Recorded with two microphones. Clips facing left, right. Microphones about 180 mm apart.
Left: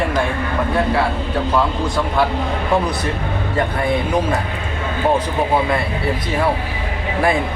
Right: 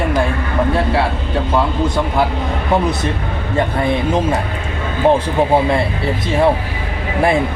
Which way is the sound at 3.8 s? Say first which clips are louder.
Right 2 dB; 25° right (ahead or behind).